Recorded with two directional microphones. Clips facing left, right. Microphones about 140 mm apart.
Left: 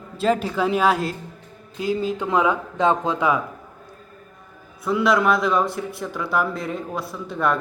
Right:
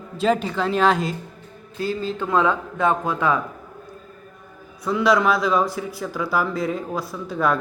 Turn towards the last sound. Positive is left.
turn(degrees=0)  # may be behind; listen again after turning